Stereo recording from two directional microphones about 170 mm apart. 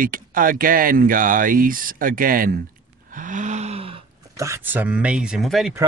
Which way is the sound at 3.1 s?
50° right (ahead or behind).